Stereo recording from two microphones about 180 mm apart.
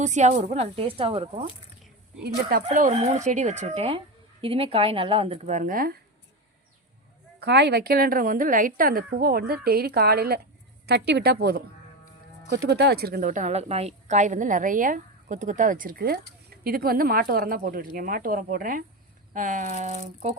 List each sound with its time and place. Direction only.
0.0 s speech: 40° right (ahead or behind)
2.2 s a woman's voice: 60° right (ahead or behind)
2.6 s speech: 40° right (ahead or behind)
7.3 s a woman's voice: 70° right (ahead or behind); by 20.3 s 45° right (ahead or behind)